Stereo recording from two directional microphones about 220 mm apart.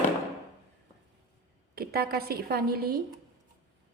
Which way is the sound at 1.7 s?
45° right (ahead or behind).